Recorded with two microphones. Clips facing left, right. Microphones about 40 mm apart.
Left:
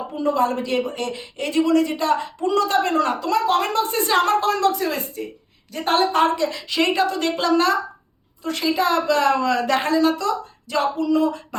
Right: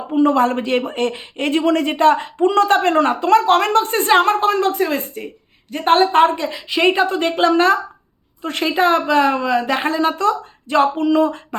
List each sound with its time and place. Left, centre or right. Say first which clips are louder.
0.1 s a woman's voice: right 6 dB; right; by 9.9 s centre
9.9 s a woman's voice: right 2 dB; right